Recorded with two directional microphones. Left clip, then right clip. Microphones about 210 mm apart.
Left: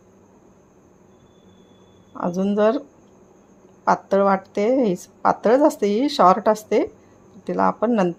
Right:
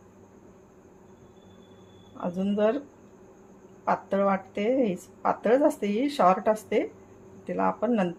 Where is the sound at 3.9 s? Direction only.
40° left (ahead or behind).